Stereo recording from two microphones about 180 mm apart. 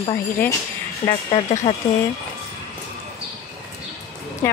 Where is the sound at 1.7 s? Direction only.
30° left (ahead or behind).